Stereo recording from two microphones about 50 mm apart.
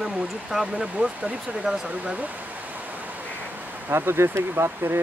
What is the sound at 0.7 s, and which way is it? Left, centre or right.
Speech, right.